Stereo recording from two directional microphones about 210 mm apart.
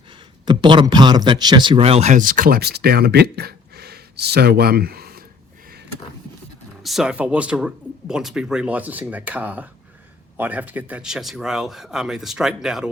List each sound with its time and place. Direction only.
0.4 s a man's voice: 20° right (ahead or behind); by 5.2 s 45° right (ahead or behind)
6.8 s speech: centre (ahead or behind)